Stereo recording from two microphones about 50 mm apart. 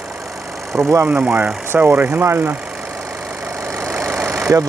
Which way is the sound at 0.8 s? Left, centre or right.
Right.